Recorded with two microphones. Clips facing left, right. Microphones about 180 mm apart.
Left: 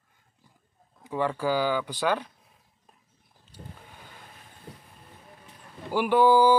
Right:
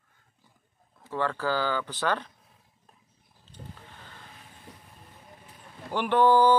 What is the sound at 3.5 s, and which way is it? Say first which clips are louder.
Vehicle: even; 10° left (ahead or behind).